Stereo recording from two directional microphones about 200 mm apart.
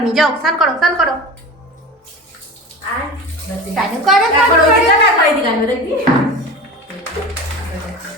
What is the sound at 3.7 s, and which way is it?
Speech, centre (ahead or behind).